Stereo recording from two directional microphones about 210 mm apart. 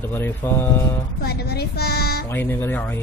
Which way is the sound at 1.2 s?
50° left (ahead or behind).